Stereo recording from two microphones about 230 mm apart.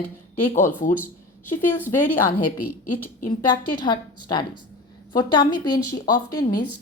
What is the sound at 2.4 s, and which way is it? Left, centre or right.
Speech, left.